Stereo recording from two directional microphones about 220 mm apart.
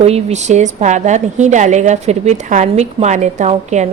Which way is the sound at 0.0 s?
30° right (ahead or behind).